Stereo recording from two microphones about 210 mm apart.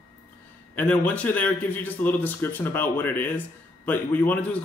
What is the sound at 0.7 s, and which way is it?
A man's voice, 5° left (ahead or behind).